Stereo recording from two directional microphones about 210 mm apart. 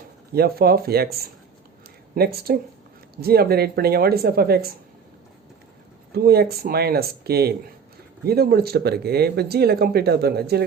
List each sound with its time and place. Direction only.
0.3 s speech: 45° right (ahead or behind)
2.1 s speech: 50° right (ahead or behind)
6.1 s speech: 50° right (ahead or behind)